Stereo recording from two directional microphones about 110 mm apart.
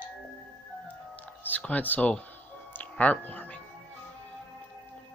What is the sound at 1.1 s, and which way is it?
Music, 15° left (ahead or behind).